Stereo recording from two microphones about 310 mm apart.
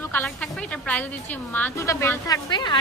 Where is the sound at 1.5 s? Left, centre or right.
Centre.